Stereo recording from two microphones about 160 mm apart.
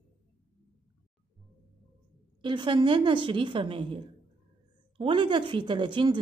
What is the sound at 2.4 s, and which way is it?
A woman's voice, 30° right (ahead or behind).